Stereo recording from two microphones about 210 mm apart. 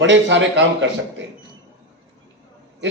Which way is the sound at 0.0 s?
60° right (ahead or behind).